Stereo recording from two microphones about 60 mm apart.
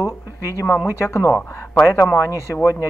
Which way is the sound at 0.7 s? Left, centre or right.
Left.